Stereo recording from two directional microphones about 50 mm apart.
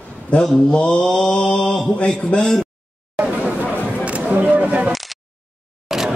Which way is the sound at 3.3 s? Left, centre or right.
Right.